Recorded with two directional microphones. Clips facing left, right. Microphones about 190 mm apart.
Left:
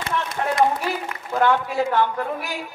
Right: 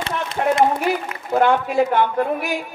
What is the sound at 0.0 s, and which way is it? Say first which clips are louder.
A man's voice: right 3 dB; 25° right (ahead or behind).